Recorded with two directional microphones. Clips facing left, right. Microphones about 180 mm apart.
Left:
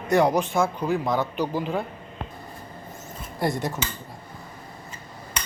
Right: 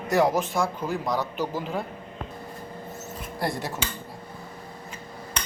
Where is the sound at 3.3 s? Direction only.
Centre (ahead or behind).